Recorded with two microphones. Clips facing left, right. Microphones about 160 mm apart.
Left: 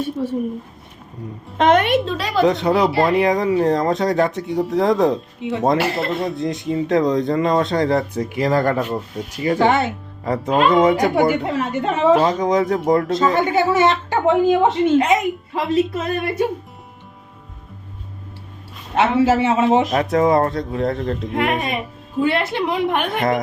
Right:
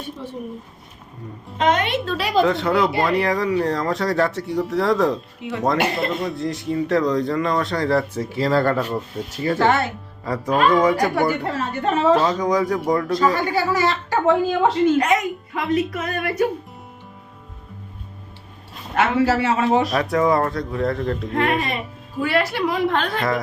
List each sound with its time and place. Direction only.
1.5 s speech: 55° left (ahead or behind)
2.4 s speech: 20° left (ahead or behind)
18.9 s speech: 20° left (ahead or behind)